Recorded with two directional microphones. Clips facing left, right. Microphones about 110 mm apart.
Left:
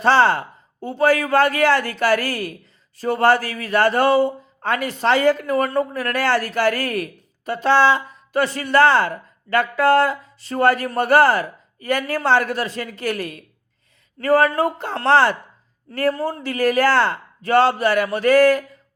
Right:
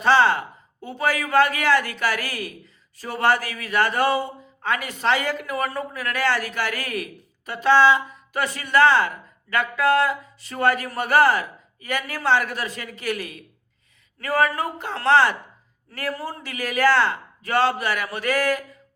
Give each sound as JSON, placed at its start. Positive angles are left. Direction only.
{"t": 0.0, "sound": "a woman's voice", "side_deg": 35}